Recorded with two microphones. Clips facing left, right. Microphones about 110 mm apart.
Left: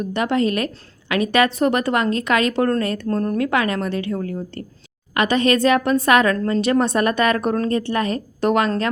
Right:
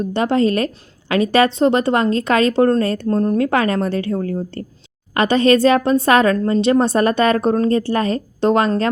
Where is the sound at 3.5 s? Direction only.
35° right (ahead or behind).